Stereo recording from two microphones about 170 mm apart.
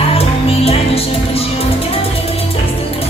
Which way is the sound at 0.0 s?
35° left (ahead or behind).